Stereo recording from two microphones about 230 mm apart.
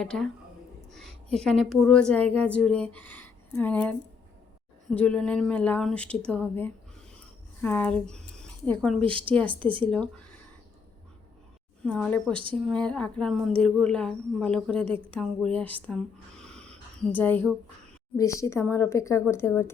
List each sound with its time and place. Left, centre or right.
0.0 s a woman's voice: centre
8.4 s a sound: centre
9.0 s a woman's voice: right
9.8 s speech: centre
11.8 s speech: centre
15.9 s a sound: centre
18.2 s a woman's voice: centre